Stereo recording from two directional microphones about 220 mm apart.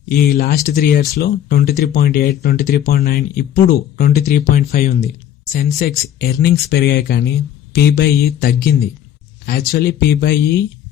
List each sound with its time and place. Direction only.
0.1 s speech: 45° left (ahead or behind)